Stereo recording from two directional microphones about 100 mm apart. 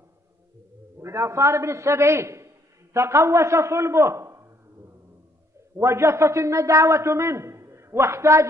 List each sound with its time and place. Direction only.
0.9 s a man's voice: 30° right (ahead or behind)
5.8 s a man's voice: 30° right (ahead or behind)